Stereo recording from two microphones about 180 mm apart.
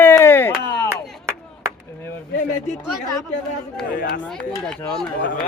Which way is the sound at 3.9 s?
50° left (ahead or behind).